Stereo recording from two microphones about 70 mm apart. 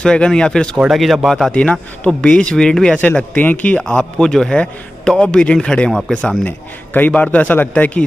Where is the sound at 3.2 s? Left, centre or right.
Left.